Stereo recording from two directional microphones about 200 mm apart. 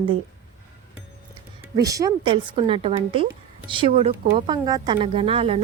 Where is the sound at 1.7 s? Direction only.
15° right (ahead or behind).